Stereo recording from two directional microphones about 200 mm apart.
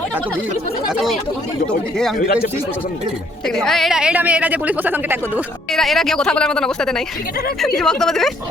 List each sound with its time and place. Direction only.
0.9 s a woman's voice: centre (ahead or behind)
2.1 s speech: 45° left (ahead or behind)
3.4 s a woman's voice: centre (ahead or behind)
5.7 s a woman's voice: centre (ahead or behind)